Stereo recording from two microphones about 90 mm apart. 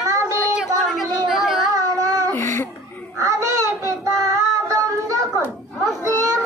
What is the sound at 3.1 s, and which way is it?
Child singing, 35° right (ahead or behind).